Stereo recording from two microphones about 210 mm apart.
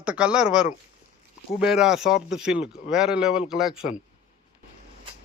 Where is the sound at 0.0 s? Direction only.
5° right (ahead or behind).